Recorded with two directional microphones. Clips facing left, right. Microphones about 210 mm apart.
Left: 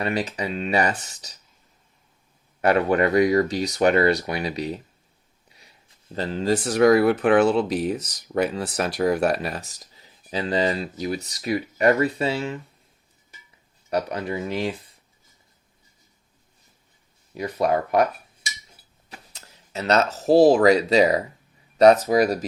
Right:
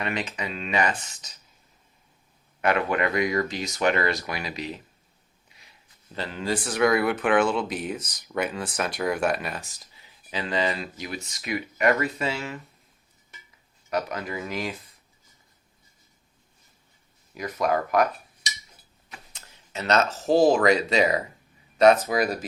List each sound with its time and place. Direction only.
0.0 s speech: 35° left (ahead or behind)
2.6 s speech: 35° left (ahead or behind)
5.5 s a sound: 35° left (ahead or behind)
6.1 s speech: 40° left (ahead or behind)
13.9 s speech: 30° left (ahead or behind)
17.3 s speech: 30° left (ahead or behind)